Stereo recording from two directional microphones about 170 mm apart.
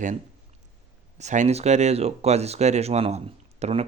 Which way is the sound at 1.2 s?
45° right (ahead or behind).